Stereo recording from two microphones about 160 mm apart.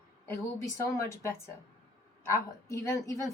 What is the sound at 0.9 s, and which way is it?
Speech, 20° left (ahead or behind).